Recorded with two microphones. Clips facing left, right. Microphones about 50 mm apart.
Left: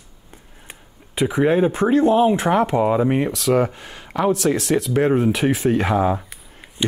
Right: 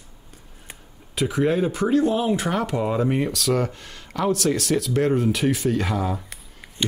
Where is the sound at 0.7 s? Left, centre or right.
Left.